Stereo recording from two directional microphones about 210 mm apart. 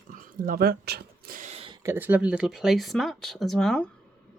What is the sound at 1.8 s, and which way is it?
Speech, 10° right (ahead or behind).